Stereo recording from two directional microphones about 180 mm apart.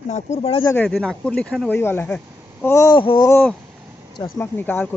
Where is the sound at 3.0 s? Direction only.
25° left (ahead or behind).